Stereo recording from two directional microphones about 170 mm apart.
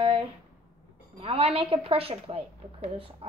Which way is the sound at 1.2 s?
35° right (ahead or behind).